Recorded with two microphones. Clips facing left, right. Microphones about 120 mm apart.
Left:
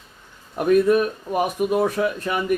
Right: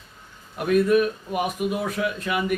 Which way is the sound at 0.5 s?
40° left (ahead or behind).